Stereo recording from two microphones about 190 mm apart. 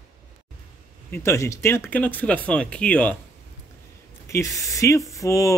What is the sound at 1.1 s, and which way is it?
Speech, 15° left (ahead or behind).